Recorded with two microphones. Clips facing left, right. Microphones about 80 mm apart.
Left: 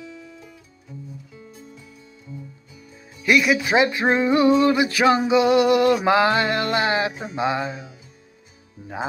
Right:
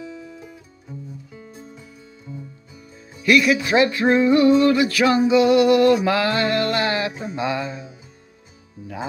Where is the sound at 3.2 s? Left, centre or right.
Centre.